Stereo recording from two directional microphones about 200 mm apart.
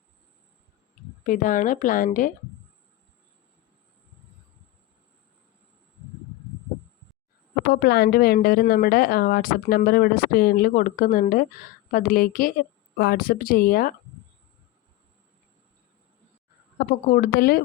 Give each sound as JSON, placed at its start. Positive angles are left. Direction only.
{"t": 1.3, "sound": "a woman's voice", "side_deg": 40}
{"t": 7.7, "sound": "speech", "side_deg": 50}
{"t": 16.7, "sound": "speech", "side_deg": 45}